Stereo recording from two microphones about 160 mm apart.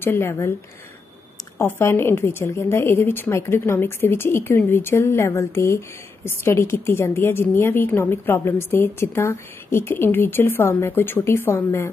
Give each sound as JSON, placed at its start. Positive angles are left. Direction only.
{"t": 0.0, "sound": "a woman's voice", "side_deg": 15}
{"t": 1.6, "sound": "a woman's voice", "side_deg": 15}